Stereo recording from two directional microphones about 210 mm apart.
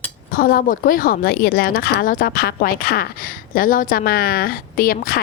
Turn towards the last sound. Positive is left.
turn(degrees=45)  # may be behind; listen again after turning